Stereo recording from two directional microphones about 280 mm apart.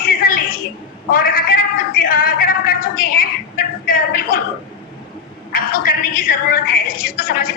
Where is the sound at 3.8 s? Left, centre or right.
Left.